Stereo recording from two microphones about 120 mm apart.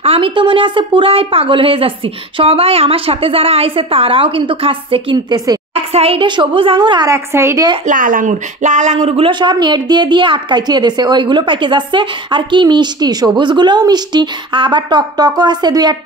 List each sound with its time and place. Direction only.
0.0 s a woman's voice: 50° right (ahead or behind)
5.1 s speech: 35° right (ahead or behind)
5.9 s a woman's voice: 55° right (ahead or behind)
6.2 s speech: 40° right (ahead or behind)
7.1 s a woman's voice: 25° right (ahead or behind)
7.8 s speech: 90° right; by 16.0 s 35° right (ahead or behind)